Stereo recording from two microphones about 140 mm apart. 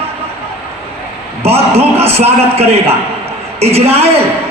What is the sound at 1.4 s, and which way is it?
Speech, 45° right (ahead or behind).